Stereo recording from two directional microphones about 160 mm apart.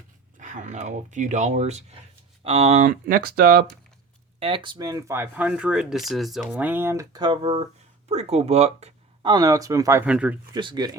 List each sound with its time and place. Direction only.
0.3 s speech: 50° right (ahead or behind)
2.8 s speech: 60° right (ahead or behind)
4.4 s speech: 35° right (ahead or behind)
8.0 s speech: 40° right (ahead or behind)
9.2 s speech: 25° right (ahead or behind)
10.1 s speech: 5° right (ahead or behind)
10.5 s speech: 25° right (ahead or behind)